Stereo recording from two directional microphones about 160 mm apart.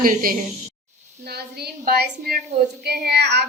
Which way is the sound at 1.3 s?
90° right.